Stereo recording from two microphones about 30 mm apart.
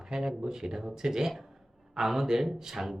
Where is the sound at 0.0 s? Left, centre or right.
Right.